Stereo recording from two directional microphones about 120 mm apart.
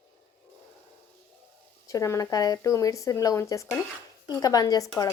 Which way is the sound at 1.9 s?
25° left (ahead or behind).